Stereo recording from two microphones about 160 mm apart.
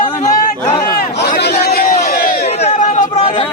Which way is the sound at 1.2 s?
90° left.